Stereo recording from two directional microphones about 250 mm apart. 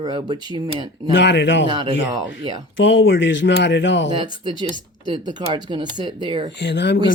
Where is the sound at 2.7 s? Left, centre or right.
Left.